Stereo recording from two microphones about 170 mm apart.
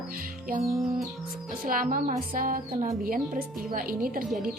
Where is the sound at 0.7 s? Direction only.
Centre (ahead or behind).